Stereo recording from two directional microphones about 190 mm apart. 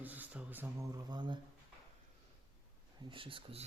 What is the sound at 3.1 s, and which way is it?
Speech, 25° right (ahead or behind).